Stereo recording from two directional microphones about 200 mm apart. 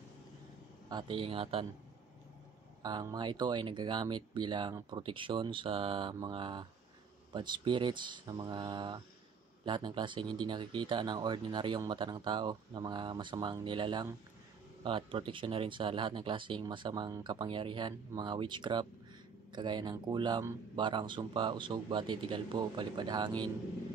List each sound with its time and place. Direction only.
0.8 s speech: 20° right (ahead or behind)
2.8 s speech: 20° right (ahead or behind)